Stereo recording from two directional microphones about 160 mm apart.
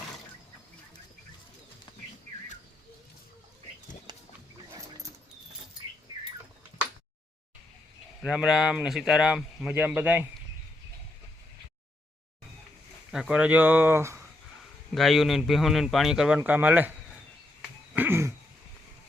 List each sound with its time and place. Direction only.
4.1 s wild animals: 25° right (ahead or behind)
8.2 s speech: 5° right (ahead or behind)
13.1 s speech: 5° right (ahead or behind)
14.9 s speech: centre (ahead or behind)
17.9 s cough: 15° right (ahead or behind)